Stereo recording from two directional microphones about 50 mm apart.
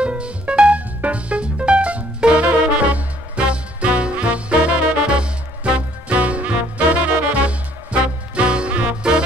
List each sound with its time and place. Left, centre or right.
0.0 s music: right